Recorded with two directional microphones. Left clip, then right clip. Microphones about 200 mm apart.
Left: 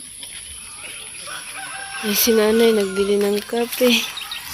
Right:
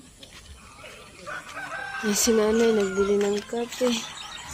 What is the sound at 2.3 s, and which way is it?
Speech, 25° left (ahead or behind).